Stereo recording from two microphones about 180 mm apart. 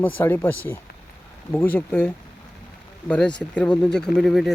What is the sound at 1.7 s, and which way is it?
Speech, 10° left (ahead or behind).